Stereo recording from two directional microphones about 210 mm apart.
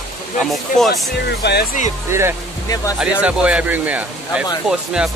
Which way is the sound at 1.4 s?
55° left (ahead or behind).